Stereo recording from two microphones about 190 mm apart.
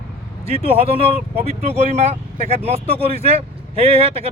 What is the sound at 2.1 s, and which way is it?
Speech, 35° right (ahead or behind).